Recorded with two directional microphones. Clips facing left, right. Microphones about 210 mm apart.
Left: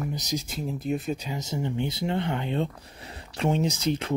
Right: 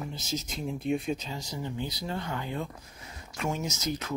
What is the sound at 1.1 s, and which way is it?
Speech, 20° left (ahead or behind).